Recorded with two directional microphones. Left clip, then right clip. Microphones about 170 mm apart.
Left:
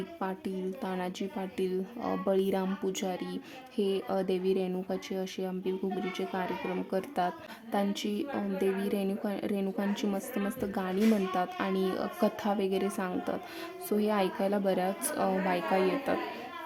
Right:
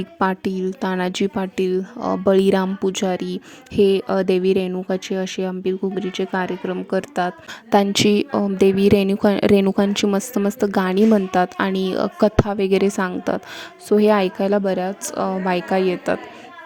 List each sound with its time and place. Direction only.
0.2 s a woman's voice: 45° right (ahead or behind)
7.7 s a woman's voice: 55° right (ahead or behind)